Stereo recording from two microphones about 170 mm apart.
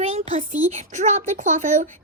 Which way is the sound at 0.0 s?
40° right (ahead or behind).